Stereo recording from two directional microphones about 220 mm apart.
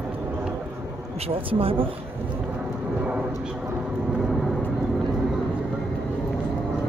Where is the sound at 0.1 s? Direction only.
10° right (ahead or behind).